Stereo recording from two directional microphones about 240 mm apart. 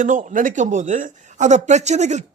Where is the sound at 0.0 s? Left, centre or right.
Right.